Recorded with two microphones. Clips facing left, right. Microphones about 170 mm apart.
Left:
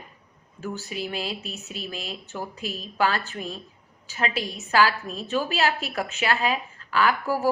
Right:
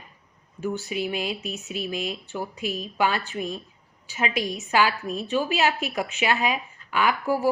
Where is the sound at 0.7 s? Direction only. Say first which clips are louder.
Right 2 dB; 35° left (ahead or behind).